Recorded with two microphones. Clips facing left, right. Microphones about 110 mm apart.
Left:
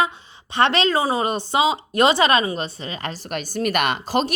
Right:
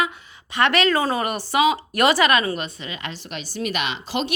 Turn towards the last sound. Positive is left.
turn(degrees=45)  # may be behind; listen again after turning